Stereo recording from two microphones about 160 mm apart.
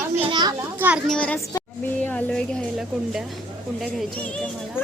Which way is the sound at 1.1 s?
10° left (ahead or behind).